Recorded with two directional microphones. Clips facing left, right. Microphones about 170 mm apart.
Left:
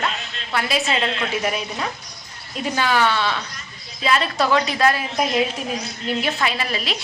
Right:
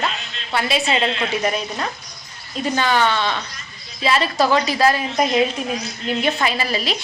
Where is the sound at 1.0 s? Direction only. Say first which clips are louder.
Right 2 dB; 25° right (ahead or behind).